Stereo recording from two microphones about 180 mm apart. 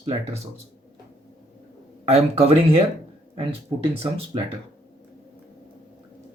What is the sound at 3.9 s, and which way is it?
Speech, 30° right (ahead or behind).